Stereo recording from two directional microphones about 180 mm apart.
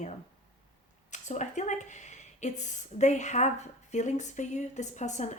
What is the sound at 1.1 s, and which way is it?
Speech, 40° left (ahead or behind).